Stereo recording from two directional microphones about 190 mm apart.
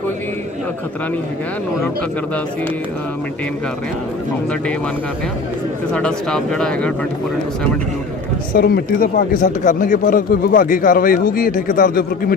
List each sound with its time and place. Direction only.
5.9 s speech: 5° left (ahead or behind)
8.5 s speech: 50° left (ahead or behind)